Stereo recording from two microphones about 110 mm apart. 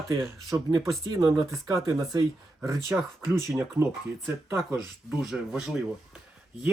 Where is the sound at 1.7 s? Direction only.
30° right (ahead or behind).